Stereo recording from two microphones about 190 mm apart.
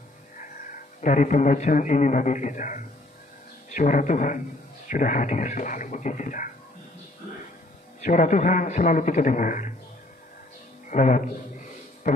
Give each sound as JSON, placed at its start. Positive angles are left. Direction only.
{"t": 0.4, "sound": "a man's voice", "side_deg": 45}
{"t": 8.0, "sound": "a man's voice", "side_deg": 40}
{"t": 10.9, "sound": "a man's voice", "side_deg": 40}